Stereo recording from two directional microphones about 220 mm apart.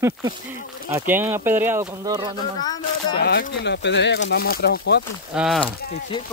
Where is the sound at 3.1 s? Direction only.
45° left (ahead or behind).